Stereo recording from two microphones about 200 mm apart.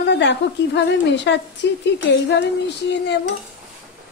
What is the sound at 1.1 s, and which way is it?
Speech, 60° left (ahead or behind).